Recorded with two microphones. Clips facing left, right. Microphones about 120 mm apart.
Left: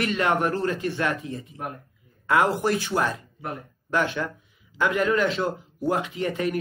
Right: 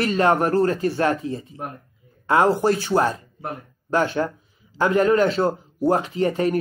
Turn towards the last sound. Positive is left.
turn(degrees=-35)  # may be behind; listen again after turning